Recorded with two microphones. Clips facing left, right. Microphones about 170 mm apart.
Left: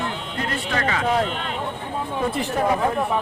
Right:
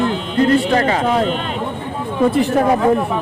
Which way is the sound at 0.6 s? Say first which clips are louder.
Right 8 dB; 35° right (ahead or behind).